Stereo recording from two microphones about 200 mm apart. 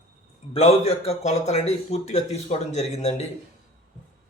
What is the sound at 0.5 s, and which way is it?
A man's voice, 30° left (ahead or behind).